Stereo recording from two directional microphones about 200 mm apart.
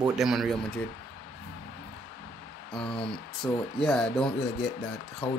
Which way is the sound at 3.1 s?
Centre (ahead or behind).